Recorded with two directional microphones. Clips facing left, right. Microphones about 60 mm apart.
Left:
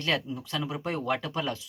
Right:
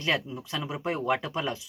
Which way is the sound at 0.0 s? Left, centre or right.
Centre.